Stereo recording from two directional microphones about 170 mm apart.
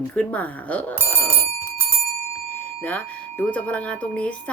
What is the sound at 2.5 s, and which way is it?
Speech, 10° left (ahead or behind).